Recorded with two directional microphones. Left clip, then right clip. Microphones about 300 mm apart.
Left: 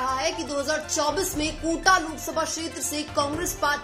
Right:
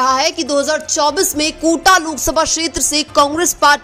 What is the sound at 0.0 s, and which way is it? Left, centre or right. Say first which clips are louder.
A woman's voice: right 12 dB; right.